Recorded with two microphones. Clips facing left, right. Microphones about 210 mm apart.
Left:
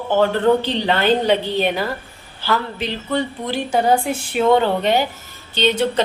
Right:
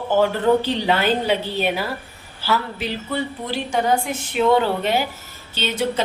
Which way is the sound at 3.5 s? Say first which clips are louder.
Left 3 dB; 35° left (ahead or behind).